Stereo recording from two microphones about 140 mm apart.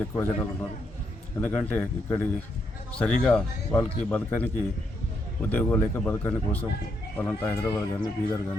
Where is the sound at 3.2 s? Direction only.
10° left (ahead or behind).